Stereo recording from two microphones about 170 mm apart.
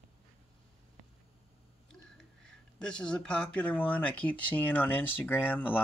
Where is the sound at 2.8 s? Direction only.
5° left (ahead or behind).